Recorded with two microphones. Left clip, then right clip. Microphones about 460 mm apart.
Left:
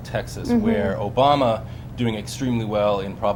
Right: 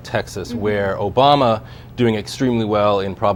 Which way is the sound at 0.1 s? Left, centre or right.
Right.